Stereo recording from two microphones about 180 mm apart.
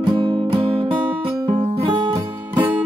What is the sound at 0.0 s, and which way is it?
Music, 25° right (ahead or behind).